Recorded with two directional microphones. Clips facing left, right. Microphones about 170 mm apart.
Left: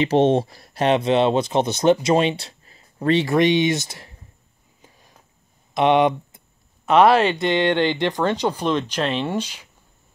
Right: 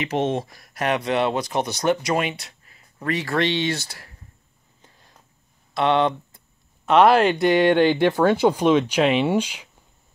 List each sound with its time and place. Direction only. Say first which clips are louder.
0.0 s speech: left 6 dB; 30° left (ahead or behind)
3.3 s speech: left 2 dB; 15° left (ahead or behind)
4.8 s a sound: left 2 dB; 15° left (ahead or behind)
5.8 s speech: left 3 dB; 15° left (ahead or behind)
6.9 s speech: even; centre (ahead or behind)